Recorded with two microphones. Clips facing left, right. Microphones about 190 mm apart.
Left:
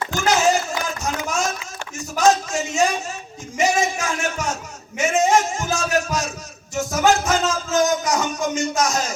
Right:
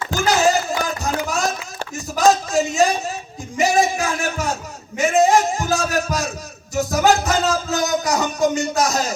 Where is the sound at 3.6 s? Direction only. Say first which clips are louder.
Right 3 dB; 35° right (ahead or behind).